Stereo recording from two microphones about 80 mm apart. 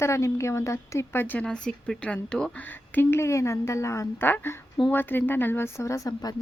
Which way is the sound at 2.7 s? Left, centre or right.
Left.